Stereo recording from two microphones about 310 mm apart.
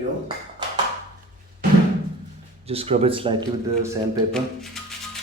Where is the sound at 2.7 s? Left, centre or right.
Centre.